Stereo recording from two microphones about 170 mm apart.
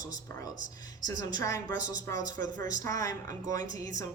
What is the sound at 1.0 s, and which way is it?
A woman's voice, 25° left (ahead or behind).